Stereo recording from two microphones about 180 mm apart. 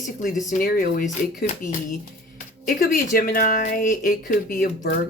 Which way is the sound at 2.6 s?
50° left (ahead or behind).